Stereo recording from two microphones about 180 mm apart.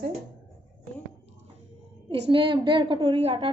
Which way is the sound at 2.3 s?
25° right (ahead or behind).